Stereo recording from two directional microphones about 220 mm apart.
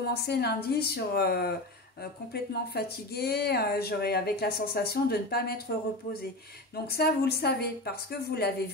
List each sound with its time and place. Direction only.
0.1 s speech: 50° left (ahead or behind)
6.9 s speech: 45° left (ahead or behind)